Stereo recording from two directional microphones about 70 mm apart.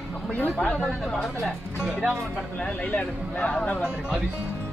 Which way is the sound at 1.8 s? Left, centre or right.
Centre.